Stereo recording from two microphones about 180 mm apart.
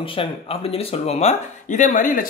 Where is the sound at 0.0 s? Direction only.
30° left (ahead or behind).